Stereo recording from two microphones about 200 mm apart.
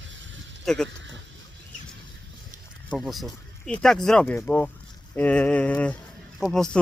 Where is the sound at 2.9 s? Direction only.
Centre (ahead or behind).